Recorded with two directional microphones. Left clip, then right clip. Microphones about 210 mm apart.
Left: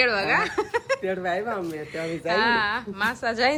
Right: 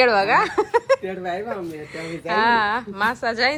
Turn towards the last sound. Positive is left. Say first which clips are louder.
# right 2 dB
turn(degrees=15)  # may be behind; listen again after turning